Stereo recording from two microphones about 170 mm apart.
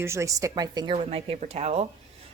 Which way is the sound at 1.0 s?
35° right (ahead or behind).